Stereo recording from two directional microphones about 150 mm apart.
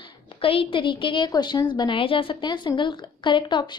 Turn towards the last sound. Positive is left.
turn(degrees=30)  # may be behind; listen again after turning